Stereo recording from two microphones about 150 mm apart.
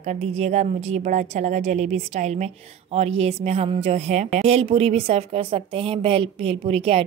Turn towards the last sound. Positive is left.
turn(degrees=-40)  # may be behind; listen again after turning